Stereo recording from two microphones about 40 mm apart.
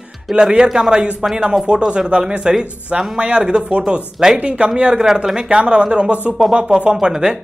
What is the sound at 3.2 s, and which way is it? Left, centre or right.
Speech, right.